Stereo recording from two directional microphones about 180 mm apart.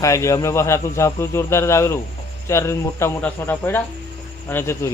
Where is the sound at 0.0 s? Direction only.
15° left (ahead or behind).